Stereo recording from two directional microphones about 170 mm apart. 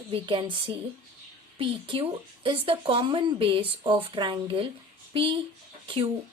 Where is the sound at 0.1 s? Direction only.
30° right (ahead or behind).